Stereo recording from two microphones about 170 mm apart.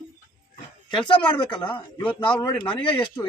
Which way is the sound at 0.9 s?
25° left (ahead or behind).